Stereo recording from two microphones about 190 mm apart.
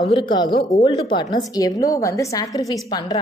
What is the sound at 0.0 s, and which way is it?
A woman's voice, 25° left (ahead or behind).